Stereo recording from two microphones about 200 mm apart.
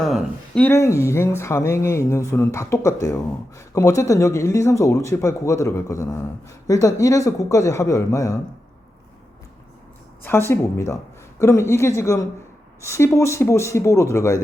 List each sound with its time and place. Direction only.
0.0 s speech: centre (ahead or behind); by 8.4 s 15° left (ahead or behind)
10.5 s a woman's voice: 15° left (ahead or behind)